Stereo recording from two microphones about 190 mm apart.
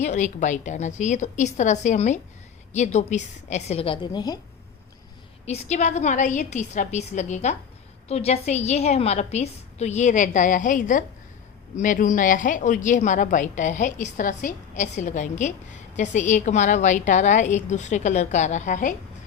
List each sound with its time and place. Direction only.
0.0 s a woman's voice: 40° left (ahead or behind); by 4.4 s 20° left (ahead or behind)
5.5 s a woman's voice: 35° left (ahead or behind)